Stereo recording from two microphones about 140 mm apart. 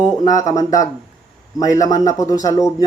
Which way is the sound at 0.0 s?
30° left (ahead or behind).